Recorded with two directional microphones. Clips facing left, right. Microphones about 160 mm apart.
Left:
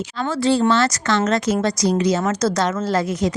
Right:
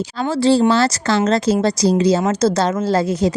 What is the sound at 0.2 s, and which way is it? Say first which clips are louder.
A woman's voice: right 4 dB; 30° right (ahead or behind).